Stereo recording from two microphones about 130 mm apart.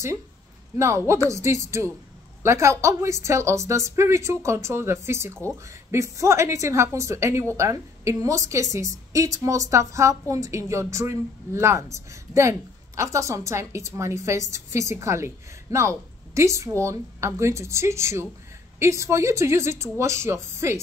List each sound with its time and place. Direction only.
0.7 s a woman's voice: 20° right (ahead or behind)